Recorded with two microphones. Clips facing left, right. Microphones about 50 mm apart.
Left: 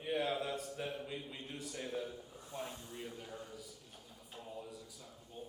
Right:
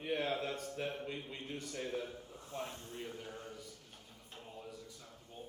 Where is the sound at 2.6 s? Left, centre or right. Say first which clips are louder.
Right 1 dB; right.